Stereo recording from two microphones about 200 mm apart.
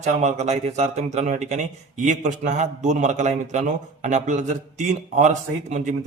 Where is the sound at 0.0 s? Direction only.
35° right (ahead or behind).